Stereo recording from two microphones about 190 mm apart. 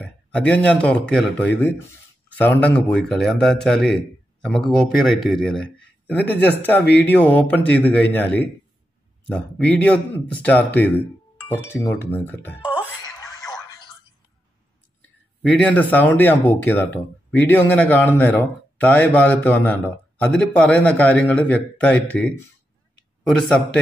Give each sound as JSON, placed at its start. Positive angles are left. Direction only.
{"t": 0.0, "sound": "a man's voice", "side_deg": 5}
{"t": 13.0, "sound": "a sound", "side_deg": 20}
{"t": 15.4, "sound": "a man's voice", "side_deg": 5}